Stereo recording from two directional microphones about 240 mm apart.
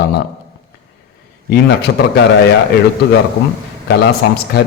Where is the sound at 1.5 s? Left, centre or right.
Left.